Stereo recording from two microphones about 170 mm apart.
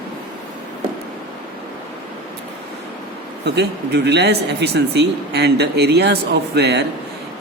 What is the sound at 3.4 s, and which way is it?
Speech, 85° right.